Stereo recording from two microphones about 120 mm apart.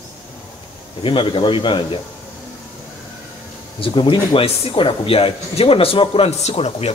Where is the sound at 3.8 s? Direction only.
45° left (ahead or behind).